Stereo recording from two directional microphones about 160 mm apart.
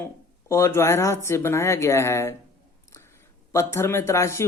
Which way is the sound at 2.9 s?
15° left (ahead or behind).